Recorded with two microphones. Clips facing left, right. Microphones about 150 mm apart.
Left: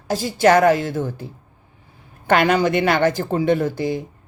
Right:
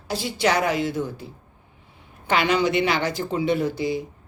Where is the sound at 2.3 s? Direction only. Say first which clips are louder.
Left 4 dB; 50° left (ahead or behind).